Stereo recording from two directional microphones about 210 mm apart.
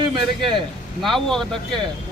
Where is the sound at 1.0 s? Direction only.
Centre (ahead or behind).